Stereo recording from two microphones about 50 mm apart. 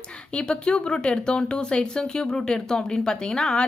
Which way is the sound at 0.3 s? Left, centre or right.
Centre.